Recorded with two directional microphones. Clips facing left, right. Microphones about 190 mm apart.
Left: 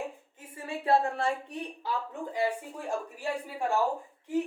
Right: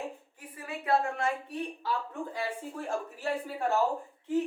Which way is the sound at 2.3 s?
15° left (ahead or behind).